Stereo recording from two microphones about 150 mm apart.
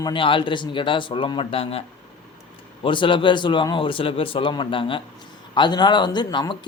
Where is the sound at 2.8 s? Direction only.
35° left (ahead or behind).